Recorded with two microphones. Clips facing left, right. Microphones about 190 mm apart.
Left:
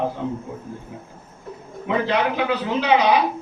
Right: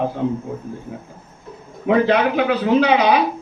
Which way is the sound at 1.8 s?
55° right (ahead or behind).